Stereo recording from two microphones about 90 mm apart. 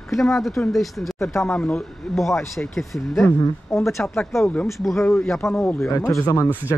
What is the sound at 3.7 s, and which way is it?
Speech, 30° left (ahead or behind).